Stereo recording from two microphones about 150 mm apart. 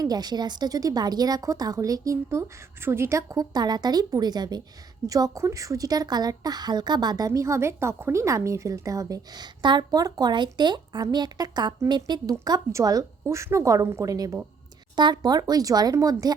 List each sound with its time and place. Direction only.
0.0 s a woman's voice: 25° right (ahead or behind)